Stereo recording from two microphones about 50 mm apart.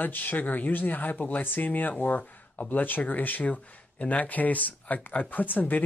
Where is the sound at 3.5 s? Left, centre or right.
Left.